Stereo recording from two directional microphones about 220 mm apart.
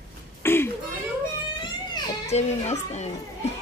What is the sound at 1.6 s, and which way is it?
Music, 25° left (ahead or behind).